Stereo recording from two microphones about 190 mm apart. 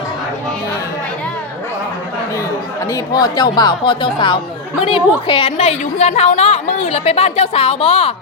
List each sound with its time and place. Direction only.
2.9 s a woman's voice: 20° left (ahead or behind)